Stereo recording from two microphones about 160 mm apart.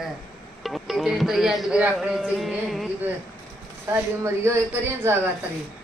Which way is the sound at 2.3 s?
5° right (ahead or behind).